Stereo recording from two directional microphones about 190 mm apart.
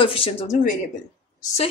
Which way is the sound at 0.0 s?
30° left (ahead or behind).